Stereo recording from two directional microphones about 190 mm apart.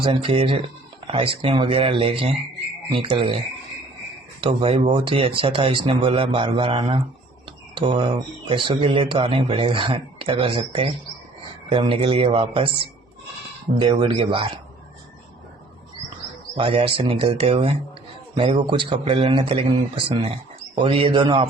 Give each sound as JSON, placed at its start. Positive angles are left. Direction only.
{"t": 0.0, "sound": "speech", "side_deg": -30}
{"t": 16.6, "sound": "speech", "side_deg": -30}